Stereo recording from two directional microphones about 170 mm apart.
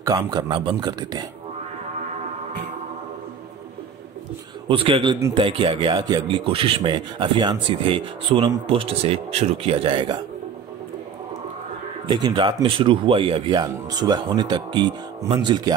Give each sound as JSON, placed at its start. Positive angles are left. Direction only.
{"t": 0.3, "sound": "speech", "side_deg": -25}
{"t": 4.6, "sound": "a man's voice", "side_deg": -30}
{"t": 12.1, "sound": "speech", "side_deg": -25}